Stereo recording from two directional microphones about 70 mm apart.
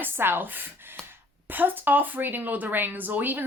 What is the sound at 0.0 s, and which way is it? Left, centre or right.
Speech, right.